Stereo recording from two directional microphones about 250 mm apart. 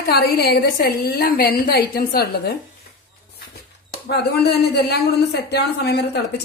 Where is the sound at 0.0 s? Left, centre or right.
Left.